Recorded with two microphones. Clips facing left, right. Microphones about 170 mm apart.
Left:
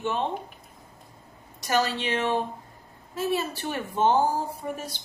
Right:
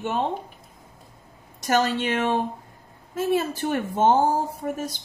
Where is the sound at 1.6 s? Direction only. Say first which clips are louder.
Right 3 dB; 50° right (ahead or behind).